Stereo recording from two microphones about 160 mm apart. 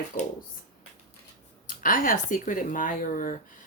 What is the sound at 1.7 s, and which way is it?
Speech, 55° left (ahead or behind).